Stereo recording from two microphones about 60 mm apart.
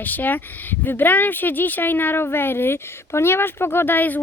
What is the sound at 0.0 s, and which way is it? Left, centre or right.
Speech, left.